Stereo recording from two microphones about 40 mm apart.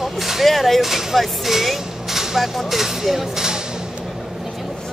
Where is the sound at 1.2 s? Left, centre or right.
Centre.